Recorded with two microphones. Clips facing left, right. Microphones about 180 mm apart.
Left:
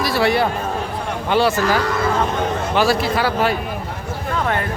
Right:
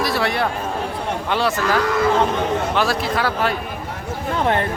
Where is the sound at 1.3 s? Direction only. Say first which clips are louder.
Left 4 dB; centre (ahead or behind).